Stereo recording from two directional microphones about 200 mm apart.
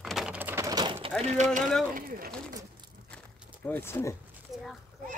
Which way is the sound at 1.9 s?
45° right (ahead or behind).